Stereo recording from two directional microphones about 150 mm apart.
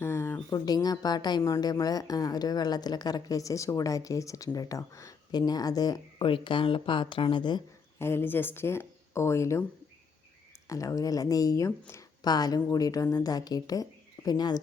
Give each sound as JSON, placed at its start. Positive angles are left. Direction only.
{"t": 0.0, "sound": "a sound", "side_deg": 15}
{"t": 0.5, "sound": "a woman's voice", "side_deg": 25}
{"t": 7.9, "sound": "speech", "side_deg": 15}
{"t": 10.7, "sound": "a woman's voice", "side_deg": 20}